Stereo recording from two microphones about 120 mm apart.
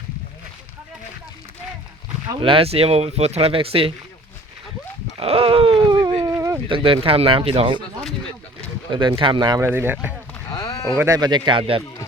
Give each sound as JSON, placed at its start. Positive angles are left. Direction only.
{"t": 2.4, "sound": "speech", "side_deg": -50}
{"t": 5.2, "sound": "a sound", "side_deg": -50}
{"t": 6.2, "sound": "a sound", "side_deg": -25}
{"t": 6.7, "sound": "speech", "side_deg": -45}
{"t": 8.9, "sound": "speech", "side_deg": -40}
{"t": 9.6, "sound": "speech", "side_deg": -20}
{"t": 10.5, "sound": "a sound", "side_deg": 30}
{"t": 10.8, "sound": "speech", "side_deg": -25}
{"t": 11.2, "sound": "speech", "side_deg": -40}